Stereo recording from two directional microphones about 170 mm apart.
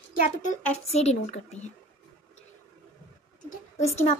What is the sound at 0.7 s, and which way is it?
A woman's voice, 40° left (ahead or behind).